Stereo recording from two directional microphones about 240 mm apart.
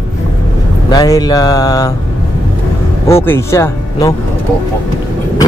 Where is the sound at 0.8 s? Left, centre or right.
Centre.